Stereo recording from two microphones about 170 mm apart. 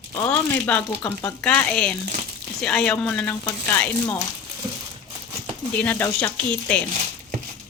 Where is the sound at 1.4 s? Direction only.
5° left (ahead or behind).